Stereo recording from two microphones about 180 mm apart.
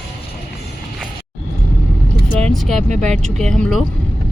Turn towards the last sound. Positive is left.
turn(degrees=5)  # may be behind; listen again after turning